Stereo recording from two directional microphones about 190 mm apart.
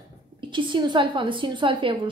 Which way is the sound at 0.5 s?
25° right (ahead or behind).